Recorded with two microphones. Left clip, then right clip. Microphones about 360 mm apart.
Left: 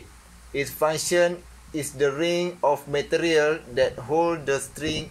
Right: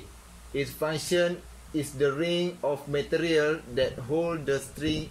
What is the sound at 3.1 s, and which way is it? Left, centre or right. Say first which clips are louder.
Speech: left 4 dB; centre.